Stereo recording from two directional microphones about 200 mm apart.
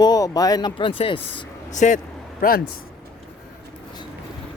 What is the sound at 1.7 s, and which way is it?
Speech, 35° left (ahead or behind).